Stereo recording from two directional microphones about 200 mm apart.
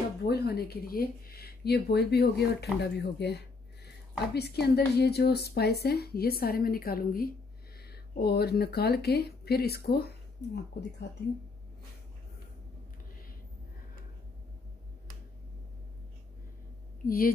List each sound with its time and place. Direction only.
0.2 s speech: 55° left (ahead or behind)
17.0 s speech: 45° left (ahead or behind)